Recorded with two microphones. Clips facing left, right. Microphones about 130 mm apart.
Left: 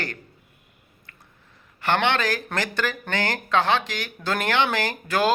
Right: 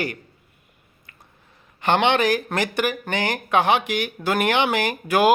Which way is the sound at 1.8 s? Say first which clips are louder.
Right 4 dB; 20° right (ahead or behind).